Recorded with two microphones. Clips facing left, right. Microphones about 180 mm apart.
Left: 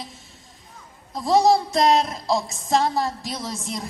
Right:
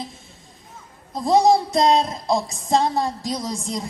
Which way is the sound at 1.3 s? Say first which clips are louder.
Right 1 dB; 20° right (ahead or behind).